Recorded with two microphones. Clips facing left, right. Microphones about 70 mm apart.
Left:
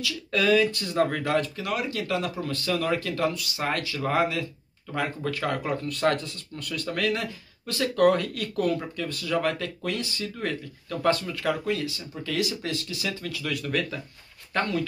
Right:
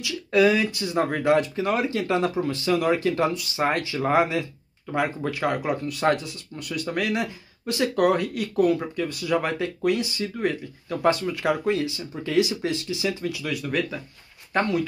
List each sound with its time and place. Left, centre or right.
0.0 s speech: centre